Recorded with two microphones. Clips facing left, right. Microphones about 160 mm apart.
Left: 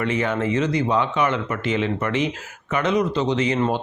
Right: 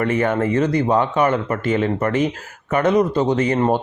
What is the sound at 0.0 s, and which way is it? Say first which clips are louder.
Speech: right 4 dB; 50° right (ahead or behind).